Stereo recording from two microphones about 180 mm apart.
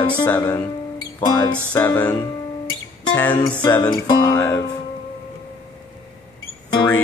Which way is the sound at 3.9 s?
20° left (ahead or behind).